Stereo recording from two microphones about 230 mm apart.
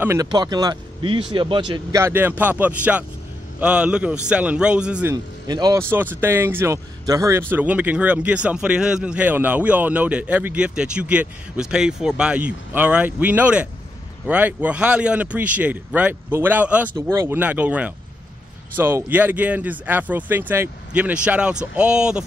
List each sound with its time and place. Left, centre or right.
0.0 s a man's voice: centre
5.1 s speech: centre